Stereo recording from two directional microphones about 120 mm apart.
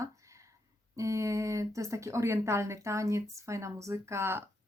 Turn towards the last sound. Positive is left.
turn(degrees=-20)  # may be behind; listen again after turning